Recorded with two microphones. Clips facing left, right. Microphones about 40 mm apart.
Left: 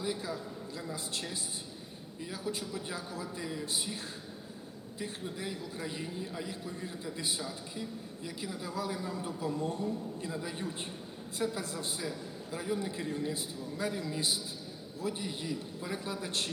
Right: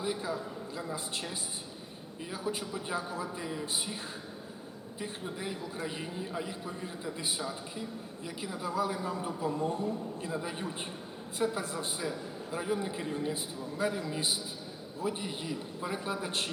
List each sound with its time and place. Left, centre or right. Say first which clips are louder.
0.0 s a man's voice: right 2 dB; centre
4.9 s a man's voice: right 1 dB; centre